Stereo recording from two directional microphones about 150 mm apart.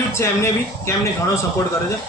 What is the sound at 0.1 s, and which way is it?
Speech, 15° left (ahead or behind).